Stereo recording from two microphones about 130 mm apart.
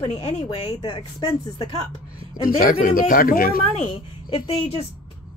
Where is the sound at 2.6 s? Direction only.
90° left.